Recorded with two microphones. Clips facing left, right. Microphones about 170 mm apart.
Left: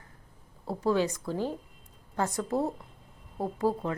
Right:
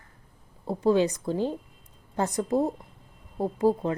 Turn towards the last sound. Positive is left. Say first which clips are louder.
# right 5 dB
turn(degrees=-15)  # may be behind; listen again after turning